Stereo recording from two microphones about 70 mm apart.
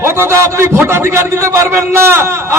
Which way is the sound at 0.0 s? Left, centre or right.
Right.